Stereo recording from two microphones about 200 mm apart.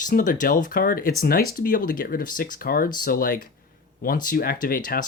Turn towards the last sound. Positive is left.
turn(degrees=45)  # may be behind; listen again after turning